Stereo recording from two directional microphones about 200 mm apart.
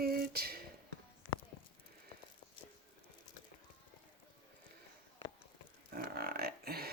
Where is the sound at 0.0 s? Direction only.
50° right (ahead or behind).